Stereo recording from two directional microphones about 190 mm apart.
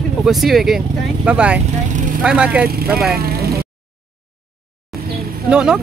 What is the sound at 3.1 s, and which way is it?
Vehicle, 55° right (ahead or behind).